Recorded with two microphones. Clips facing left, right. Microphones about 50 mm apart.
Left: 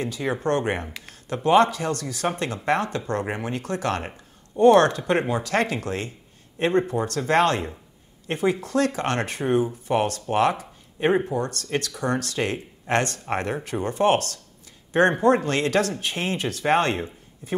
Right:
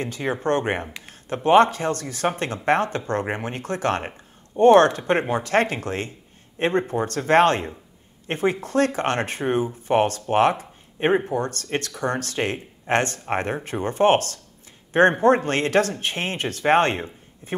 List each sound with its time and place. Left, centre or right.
0.0 s a man's voice: right